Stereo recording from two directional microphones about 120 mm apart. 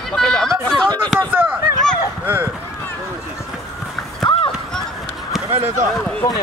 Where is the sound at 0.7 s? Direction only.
5° left (ahead or behind).